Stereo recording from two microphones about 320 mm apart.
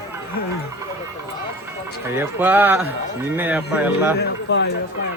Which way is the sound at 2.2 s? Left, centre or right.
Centre.